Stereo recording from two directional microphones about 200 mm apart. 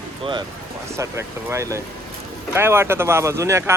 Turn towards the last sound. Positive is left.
turn(degrees=-15)  # may be behind; listen again after turning